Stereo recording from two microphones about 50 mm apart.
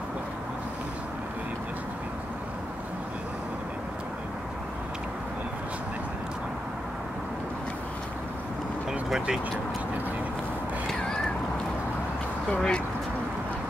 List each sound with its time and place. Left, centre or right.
12.5 s speech: centre